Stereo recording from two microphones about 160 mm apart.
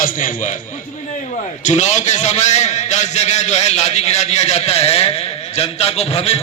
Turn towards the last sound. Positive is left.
turn(degrees=40)  # may be behind; listen again after turning